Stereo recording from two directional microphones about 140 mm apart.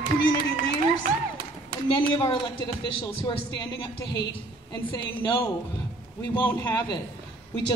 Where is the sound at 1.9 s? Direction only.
30° left (ahead or behind).